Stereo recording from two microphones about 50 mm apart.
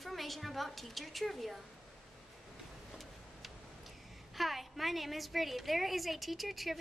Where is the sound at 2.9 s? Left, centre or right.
Centre.